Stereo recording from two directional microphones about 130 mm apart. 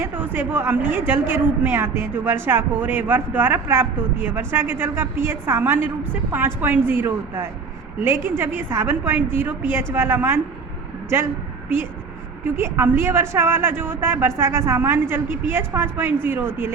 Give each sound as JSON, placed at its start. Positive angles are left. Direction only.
{"t": 0.0, "sound": "speech", "side_deg": -15}
{"t": 12.5, "sound": "speech", "side_deg": -20}